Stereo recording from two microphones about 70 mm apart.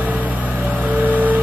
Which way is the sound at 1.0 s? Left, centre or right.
Right.